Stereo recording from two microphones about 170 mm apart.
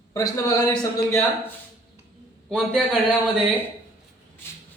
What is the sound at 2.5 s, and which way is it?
Speech, 5° left (ahead or behind).